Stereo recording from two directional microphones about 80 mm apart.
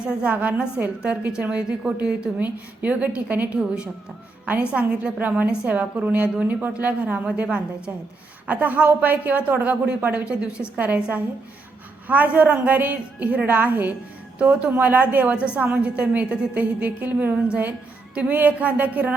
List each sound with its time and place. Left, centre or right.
0.0 s a woman's voice: centre